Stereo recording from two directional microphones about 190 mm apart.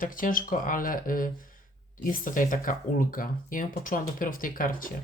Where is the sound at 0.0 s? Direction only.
45° left (ahead or behind).